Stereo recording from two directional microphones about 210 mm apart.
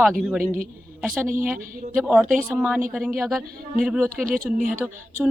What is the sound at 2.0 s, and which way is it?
Speech, centre (ahead or behind).